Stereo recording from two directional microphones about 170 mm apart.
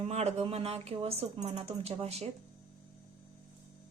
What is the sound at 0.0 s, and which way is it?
Speech, 40° right (ahead or behind).